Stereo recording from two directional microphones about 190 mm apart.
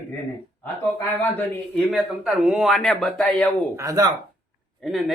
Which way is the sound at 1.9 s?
5° right (ahead or behind).